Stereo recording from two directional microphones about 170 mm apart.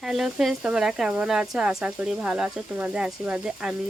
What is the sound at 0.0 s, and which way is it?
Speech, centre (ahead or behind).